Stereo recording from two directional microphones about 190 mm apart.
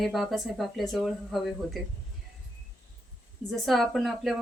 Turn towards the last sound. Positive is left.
turn(degrees=0)  # may be behind; listen again after turning